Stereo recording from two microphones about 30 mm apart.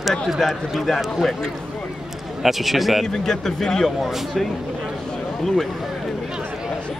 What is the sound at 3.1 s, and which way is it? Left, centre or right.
Speech, centre.